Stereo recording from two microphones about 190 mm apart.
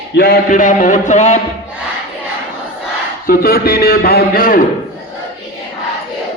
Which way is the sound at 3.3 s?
50° left (ahead or behind).